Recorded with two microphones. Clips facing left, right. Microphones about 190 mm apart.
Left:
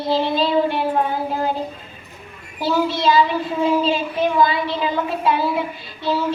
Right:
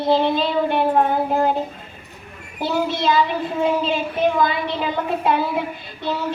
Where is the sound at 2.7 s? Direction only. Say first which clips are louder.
Left 2 dB; 55° right (ahead or behind).